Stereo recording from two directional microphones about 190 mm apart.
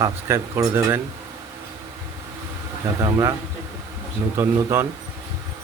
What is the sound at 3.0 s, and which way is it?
Speech, 20° right (ahead or behind).